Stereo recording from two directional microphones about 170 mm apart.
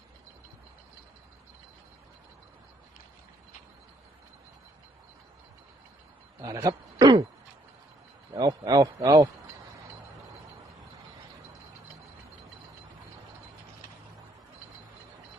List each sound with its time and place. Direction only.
6.4 s a man's voice: 20° right (ahead or behind)
8.4 s speech: 25° right (ahead or behind)